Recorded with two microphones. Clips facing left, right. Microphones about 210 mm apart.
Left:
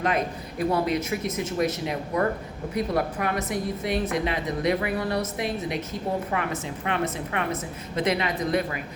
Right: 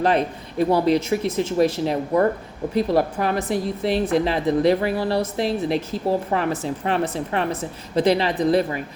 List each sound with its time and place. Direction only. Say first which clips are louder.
0.0 s a woman's voice: right 6 dB; 30° right (ahead or behind)